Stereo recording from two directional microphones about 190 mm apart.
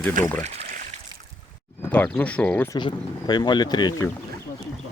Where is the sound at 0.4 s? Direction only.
35° right (ahead or behind).